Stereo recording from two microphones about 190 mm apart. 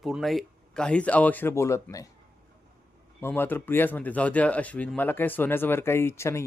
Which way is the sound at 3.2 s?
10° left (ahead or behind).